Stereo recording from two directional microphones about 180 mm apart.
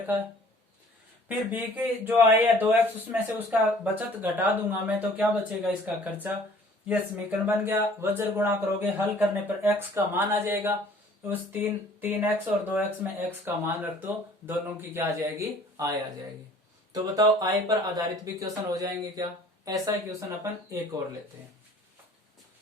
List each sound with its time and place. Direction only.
1.5 s speech: 10° right (ahead or behind)